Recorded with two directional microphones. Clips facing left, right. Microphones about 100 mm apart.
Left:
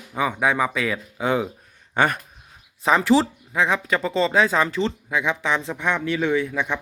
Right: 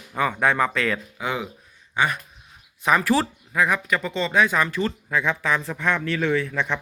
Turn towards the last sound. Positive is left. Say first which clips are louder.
# left 1 dB
turn(degrees=15)  # may be behind; listen again after turning